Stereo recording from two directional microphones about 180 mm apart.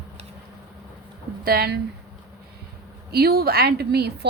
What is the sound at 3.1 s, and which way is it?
A woman's voice, 60° right (ahead or behind).